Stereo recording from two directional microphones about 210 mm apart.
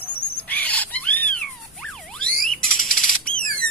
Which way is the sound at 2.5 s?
Centre (ahead or behind).